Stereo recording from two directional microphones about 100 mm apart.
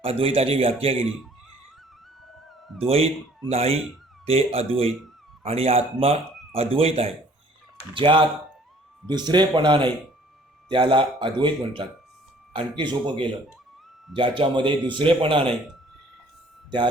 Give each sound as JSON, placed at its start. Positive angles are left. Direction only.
{"t": 0.0, "sound": "a man's voice", "side_deg": -75}
{"t": 2.8, "sound": "a man's voice", "side_deg": -80}
{"t": 5.4, "sound": "speech", "side_deg": -85}
{"t": 7.9, "sound": "speech", "side_deg": -60}
{"t": 9.0, "sound": "a man's voice", "side_deg": -45}
{"t": 12.9, "sound": "a man's voice", "side_deg": -55}